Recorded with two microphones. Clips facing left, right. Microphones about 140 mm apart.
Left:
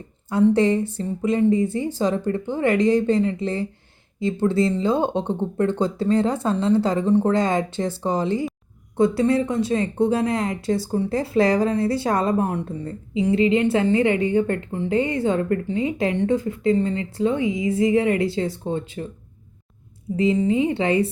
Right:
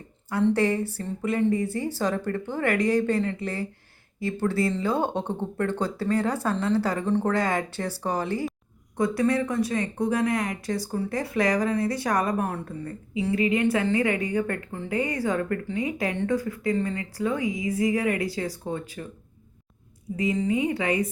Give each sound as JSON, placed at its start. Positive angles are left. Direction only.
{"t": 0.3, "sound": "speech", "side_deg": 20}
{"t": 20.1, "sound": "speech", "side_deg": 25}